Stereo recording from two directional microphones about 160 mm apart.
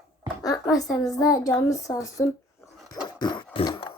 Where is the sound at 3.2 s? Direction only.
30° left (ahead or behind).